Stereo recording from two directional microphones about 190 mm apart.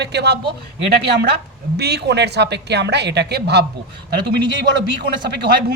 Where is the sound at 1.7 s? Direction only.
60° right (ahead or behind).